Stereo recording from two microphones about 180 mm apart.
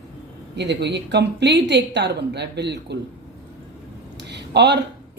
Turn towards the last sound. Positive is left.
turn(degrees=-70)  # may be behind; listen again after turning